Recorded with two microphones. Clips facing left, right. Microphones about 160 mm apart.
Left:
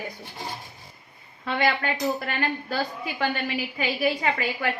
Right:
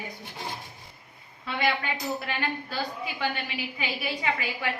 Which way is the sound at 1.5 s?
55° left (ahead or behind).